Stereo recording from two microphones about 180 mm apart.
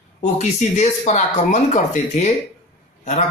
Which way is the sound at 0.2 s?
40° left (ahead or behind).